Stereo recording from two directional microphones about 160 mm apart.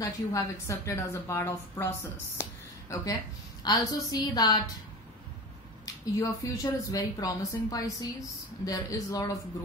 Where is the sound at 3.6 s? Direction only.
25° left (ahead or behind).